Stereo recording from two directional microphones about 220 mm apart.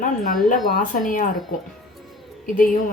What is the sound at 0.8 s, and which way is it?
Speech, 40° left (ahead or behind).